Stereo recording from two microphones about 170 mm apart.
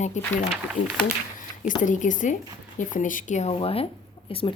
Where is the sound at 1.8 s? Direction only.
50° left (ahead or behind); by 4.5 s 35° left (ahead or behind).